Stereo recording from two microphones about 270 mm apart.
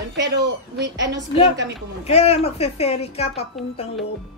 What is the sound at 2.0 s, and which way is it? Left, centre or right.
A woman's voice, left.